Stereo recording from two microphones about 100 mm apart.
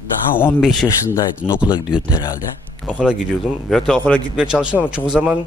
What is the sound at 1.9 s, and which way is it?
Speech, 10° right (ahead or behind).